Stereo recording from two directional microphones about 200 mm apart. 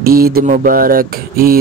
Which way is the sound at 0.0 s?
50° right (ahead or behind).